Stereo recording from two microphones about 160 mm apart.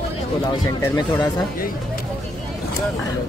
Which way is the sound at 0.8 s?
25° left (ahead or behind).